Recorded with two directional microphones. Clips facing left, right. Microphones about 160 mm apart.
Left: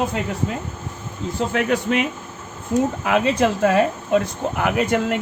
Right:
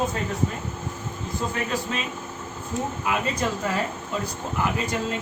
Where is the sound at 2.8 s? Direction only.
90° left.